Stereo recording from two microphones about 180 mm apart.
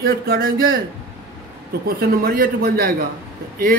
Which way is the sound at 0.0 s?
55° right (ahead or behind).